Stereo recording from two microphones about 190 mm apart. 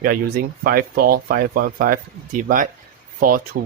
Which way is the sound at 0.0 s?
50° right (ahead or behind).